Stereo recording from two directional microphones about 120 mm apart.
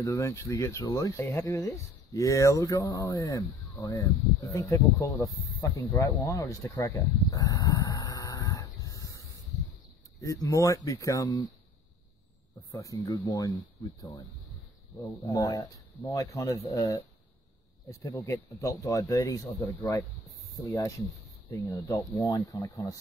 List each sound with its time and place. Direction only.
0.0 s speech: 25° left (ahead or behind)
6.7 s a sound: 25° left (ahead or behind)
10.2 s speech: 25° left (ahead or behind)
12.7 s speech: 30° left (ahead or behind)